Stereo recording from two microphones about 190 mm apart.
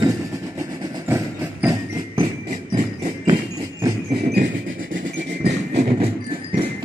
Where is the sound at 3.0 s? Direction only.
20° right (ahead or behind).